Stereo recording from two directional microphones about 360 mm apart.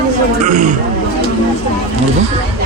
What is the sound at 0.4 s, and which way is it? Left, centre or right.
Speech, right.